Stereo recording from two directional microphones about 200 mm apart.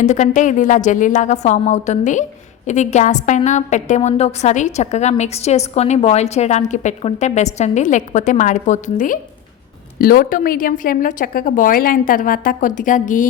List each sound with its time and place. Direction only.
0.0 s a woman's voice: 35° left (ahead or behind)